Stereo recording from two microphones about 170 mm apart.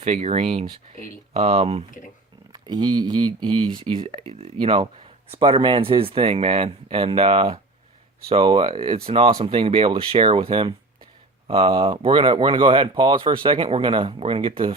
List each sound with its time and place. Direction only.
0.0 s speech: 35° right (ahead or behind)
2.5 s speech: 25° right (ahead or behind)